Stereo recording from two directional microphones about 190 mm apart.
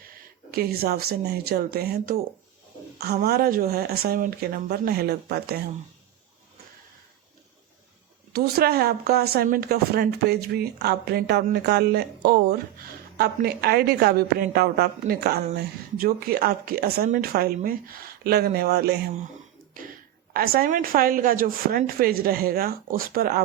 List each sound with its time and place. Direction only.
0.5 s speech: 55° right (ahead or behind)
8.3 s speech: 55° right (ahead or behind)
19.8 s speech: 45° right (ahead or behind)